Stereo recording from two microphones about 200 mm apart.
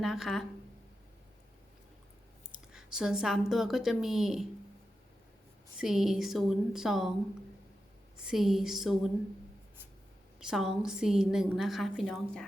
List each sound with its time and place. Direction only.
0.0 s a woman's voice: centre (ahead or behind)
2.7 s a woman's voice: 5° right (ahead or behind)
5.8 s a woman's voice: centre (ahead or behind)
8.3 s a woman's voice: centre (ahead or behind)
10.4 s a woman's voice: centre (ahead or behind)